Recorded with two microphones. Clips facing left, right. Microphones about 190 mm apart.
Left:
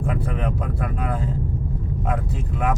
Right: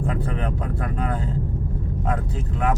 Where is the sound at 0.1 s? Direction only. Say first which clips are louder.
Left 1 dB; 5° left (ahead or behind).